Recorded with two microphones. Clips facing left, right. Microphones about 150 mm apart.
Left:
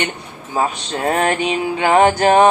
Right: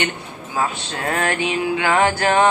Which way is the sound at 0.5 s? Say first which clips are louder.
Left 4 dB; 30° left (ahead or behind).